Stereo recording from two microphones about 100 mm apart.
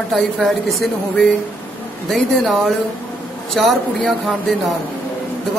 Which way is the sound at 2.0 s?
Centre (ahead or behind).